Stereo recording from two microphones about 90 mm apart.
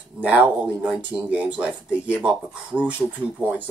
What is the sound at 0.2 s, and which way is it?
Speech, 15° right (ahead or behind).